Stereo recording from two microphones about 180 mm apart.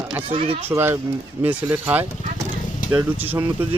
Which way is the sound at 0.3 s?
30° right (ahead or behind).